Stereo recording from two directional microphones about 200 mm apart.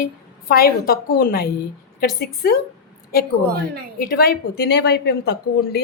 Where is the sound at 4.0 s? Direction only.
50° left (ahead or behind).